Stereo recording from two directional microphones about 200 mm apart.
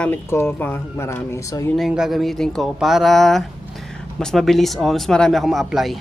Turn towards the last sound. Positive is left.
turn(degrees=0)  # may be behind; listen again after turning